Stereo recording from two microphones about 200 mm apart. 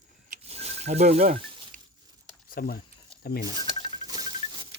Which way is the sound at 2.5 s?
45° left (ahead or behind).